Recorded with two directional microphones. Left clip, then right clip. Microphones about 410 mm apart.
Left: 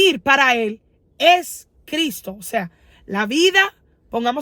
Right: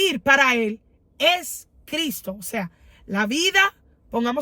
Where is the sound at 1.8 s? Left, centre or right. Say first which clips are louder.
Left 4 dB; centre.